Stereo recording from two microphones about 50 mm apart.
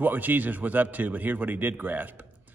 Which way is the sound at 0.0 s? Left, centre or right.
Right.